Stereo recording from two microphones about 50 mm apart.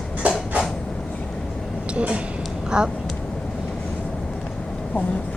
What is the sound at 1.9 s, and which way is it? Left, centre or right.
Speech, right.